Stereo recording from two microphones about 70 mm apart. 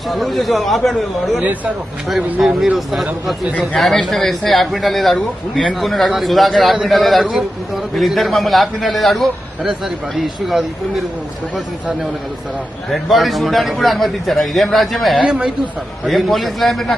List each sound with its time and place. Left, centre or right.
0.1 s a man's voice: centre
1.4 s speech: right
2.4 s a man's voice: centre
3.5 s speech: centre
3.8 s a man's voice: centre
12.9 s a man's voice: centre
15.2 s speech: centre
16.0 s a man's voice: centre